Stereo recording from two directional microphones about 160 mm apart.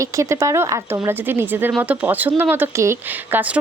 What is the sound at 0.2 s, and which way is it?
Speech, 20° right (ahead or behind).